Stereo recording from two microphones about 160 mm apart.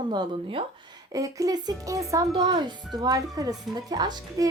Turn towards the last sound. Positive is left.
turn(degrees=-25)  # may be behind; listen again after turning